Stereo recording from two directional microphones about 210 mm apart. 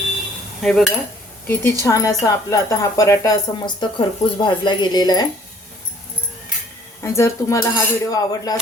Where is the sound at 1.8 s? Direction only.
15° left (ahead or behind).